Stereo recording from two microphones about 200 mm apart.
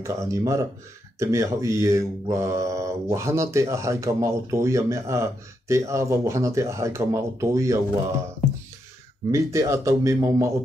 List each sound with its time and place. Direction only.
0.0 s speech: 15° right (ahead or behind)
9.3 s speech: 15° right (ahead or behind)